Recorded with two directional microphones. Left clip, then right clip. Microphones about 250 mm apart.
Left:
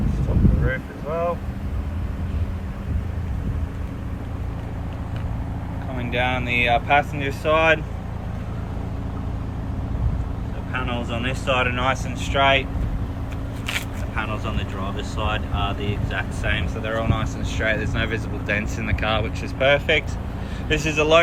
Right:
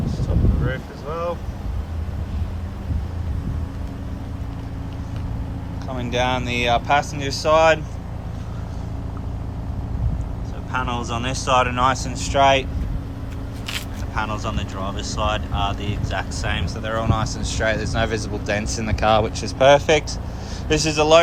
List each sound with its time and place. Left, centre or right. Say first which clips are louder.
0.7 s speech: left 2 dB; centre
6.0 s speech: right 2 dB; centre
10.7 s speech: right 3 dB; centre
13.7 s single-lens reflex camera: left 2 dB; centre
15.2 s speech: right 3 dB; centre
17.2 s speech: right 2 dB; right
17.5 s speech: right 1 dB; centre
19.6 s speech: right 4 dB; right
20.7 s speech: right 3 dB; centre